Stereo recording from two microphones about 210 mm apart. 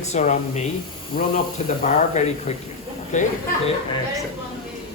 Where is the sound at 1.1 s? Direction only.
45° left (ahead or behind).